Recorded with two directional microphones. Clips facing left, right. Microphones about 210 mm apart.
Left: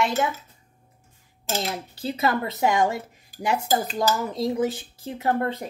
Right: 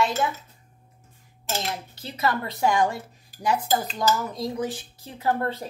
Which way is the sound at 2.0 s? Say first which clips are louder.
Left 3 dB; 25° left (ahead or behind).